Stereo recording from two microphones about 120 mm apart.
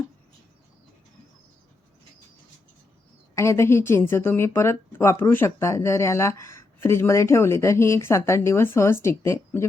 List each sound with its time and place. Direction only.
3.3 s a woman's voice: 25° left (ahead or behind)